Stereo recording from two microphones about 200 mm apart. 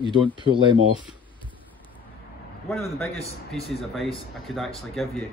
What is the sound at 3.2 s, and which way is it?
Speech, 30° left (ahead or behind).